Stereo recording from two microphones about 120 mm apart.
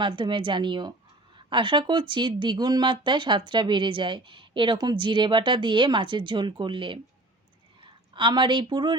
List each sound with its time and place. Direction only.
0.0 s speech: 40° right (ahead or behind)